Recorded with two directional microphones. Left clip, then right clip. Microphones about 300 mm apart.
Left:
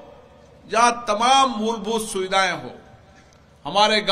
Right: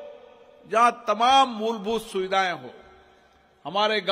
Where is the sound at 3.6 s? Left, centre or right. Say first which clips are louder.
Left 6 dB; right.